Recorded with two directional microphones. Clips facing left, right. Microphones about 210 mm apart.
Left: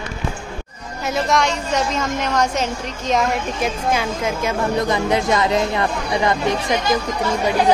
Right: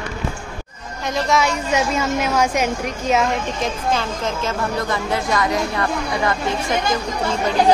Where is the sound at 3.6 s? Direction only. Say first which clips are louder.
Left 1 dB; 10° left (ahead or behind).